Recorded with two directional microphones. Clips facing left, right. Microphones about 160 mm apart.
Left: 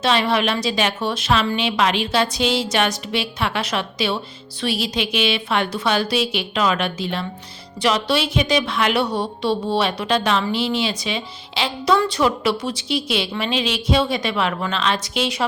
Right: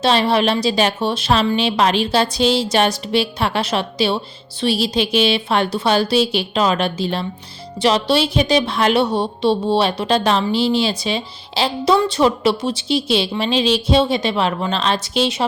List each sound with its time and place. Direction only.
0.0 s a woman's voice: 35° right (ahead or behind)